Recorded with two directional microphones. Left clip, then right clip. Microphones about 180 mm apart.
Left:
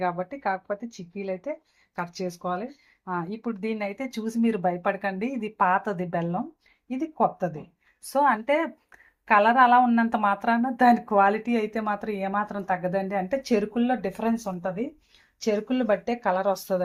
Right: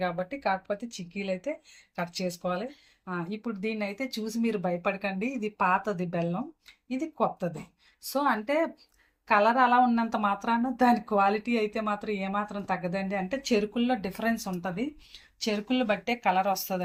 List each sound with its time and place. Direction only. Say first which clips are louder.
0.0 s speech: left 2 dB; 35° left (ahead or behind)
15.4 s speech: left 3 dB; 40° left (ahead or behind)